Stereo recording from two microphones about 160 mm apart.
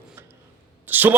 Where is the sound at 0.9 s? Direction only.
10° right (ahead or behind).